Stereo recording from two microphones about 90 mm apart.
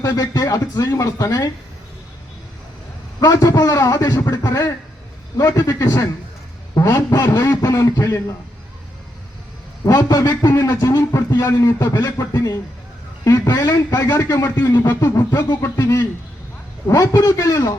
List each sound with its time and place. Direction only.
0.1 s speech: 45° left (ahead or behind)
3.2 s a man's voice: 45° left (ahead or behind)
9.8 s a man's voice: 40° left (ahead or behind)
11.3 s speech: 35° left (ahead or behind)
11.9 s a man's voice: 50° left (ahead or behind)
15.6 s speech: 35° left (ahead or behind)